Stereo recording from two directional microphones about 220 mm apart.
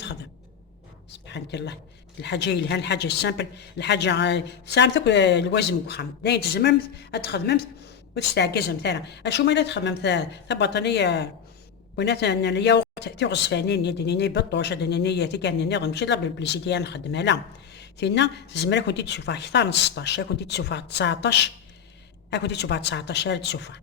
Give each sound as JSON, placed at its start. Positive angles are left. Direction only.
{"t": 1.1, "sound": "a woman's voice", "side_deg": 50}